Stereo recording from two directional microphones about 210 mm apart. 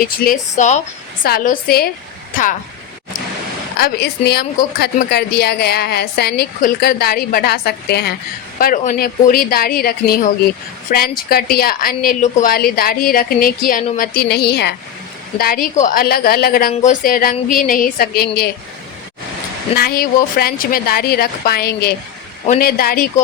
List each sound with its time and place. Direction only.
0.0 s a woman's voice: 40° left (ahead or behind)
1.2 s a woman's voice: 45° left (ahead or behind)
3.8 s a woman's voice: 45° left (ahead or behind)
19.7 s a woman's voice: 45° left (ahead or behind)